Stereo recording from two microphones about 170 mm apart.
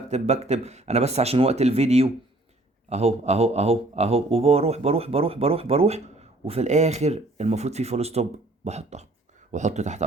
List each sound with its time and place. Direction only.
0.1 s speech: 40° right (ahead or behind)